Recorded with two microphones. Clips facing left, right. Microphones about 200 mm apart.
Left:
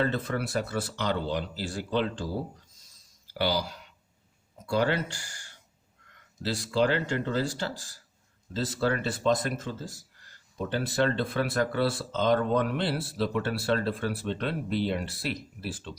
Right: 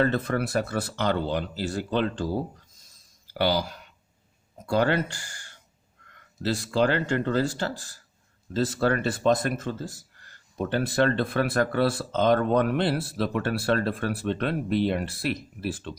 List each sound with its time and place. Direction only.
0.0 s speech: 55° right (ahead or behind)
3.3 s speech: 55° right (ahead or behind)